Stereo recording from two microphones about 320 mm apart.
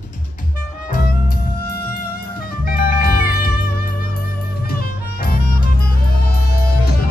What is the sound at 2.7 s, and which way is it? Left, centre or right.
Music, left.